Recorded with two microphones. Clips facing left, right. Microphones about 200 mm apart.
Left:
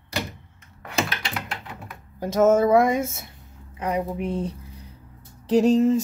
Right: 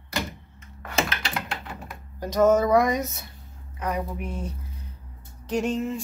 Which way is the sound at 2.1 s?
25° left (ahead or behind).